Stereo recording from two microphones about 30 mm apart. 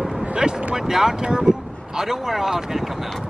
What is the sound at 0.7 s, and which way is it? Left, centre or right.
Speech, centre.